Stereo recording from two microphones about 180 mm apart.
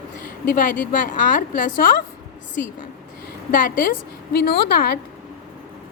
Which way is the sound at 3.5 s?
50° left (ahead or behind).